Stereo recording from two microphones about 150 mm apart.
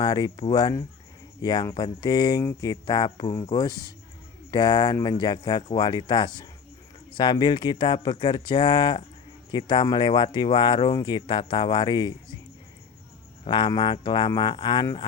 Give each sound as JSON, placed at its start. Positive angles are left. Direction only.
{"t": 0.0, "sound": "speech", "side_deg": 25}
{"t": 13.4, "sound": "speech", "side_deg": 30}